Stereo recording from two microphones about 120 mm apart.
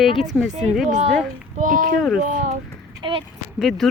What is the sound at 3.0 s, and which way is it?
Speech, 40° right (ahead or behind).